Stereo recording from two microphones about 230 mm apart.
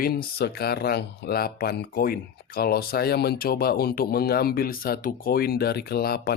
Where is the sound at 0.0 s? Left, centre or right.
Left.